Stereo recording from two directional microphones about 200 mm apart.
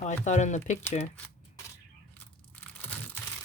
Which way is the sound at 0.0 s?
35° left (ahead or behind).